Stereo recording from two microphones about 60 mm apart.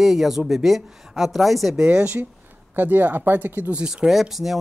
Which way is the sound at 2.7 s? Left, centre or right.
Right.